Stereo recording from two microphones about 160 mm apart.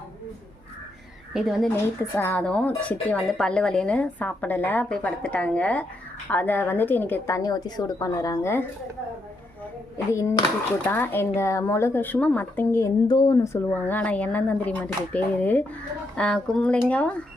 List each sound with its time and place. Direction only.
1.3 s speech: centre (ahead or behind)
1.7 s speech: 10° left (ahead or behind)
10.8 s speech: 10° left (ahead or behind)